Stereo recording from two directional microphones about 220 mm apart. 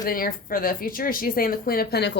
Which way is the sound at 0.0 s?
40° left (ahead or behind).